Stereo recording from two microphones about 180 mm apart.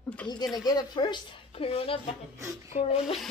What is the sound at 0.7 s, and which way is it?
A woman's voice, 25° left (ahead or behind).